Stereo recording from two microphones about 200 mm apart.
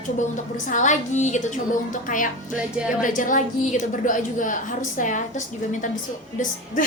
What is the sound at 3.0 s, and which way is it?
A woman's voice, 40° left (ahead or behind).